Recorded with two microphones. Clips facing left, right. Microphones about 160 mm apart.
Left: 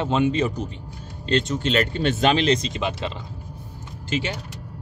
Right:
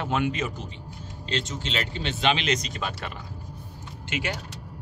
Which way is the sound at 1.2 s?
55° left (ahead or behind).